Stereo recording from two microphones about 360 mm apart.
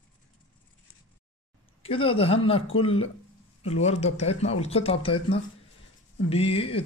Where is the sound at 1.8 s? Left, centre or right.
Centre.